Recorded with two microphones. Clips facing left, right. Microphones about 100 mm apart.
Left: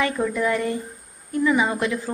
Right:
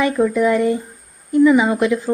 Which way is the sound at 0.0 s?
20° right (ahead or behind).